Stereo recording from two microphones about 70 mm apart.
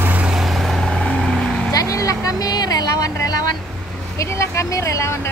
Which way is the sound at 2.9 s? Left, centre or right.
Left.